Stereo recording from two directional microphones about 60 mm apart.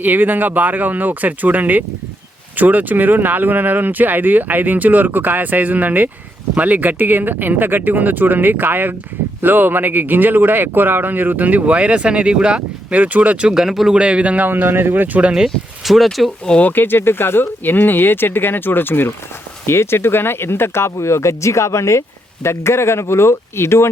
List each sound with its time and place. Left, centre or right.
0.0 s speech: right
13.5 s speech: centre
13.9 s speech: centre
14.5 s speech: right
15.4 s speech: centre
16.6 s speech: left